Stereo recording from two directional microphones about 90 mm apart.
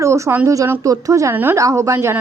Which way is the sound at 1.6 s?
35° right (ahead or behind).